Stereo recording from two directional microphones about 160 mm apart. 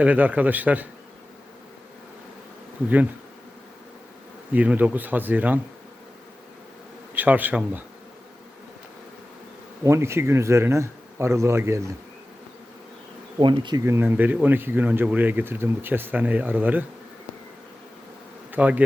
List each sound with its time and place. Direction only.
0.0 s speech: 10° right (ahead or behind)
4.5 s speech: 10° right (ahead or behind)
7.1 s speech: 10° right (ahead or behind)
9.8 s speech: 15° right (ahead or behind)
13.4 s bee: 30° right (ahead or behind)
13.8 s speech: 15° right (ahead or behind)
18.5 s bee: 10° right (ahead or behind)